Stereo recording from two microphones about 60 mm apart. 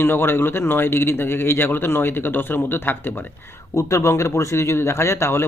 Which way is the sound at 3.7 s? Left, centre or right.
Left.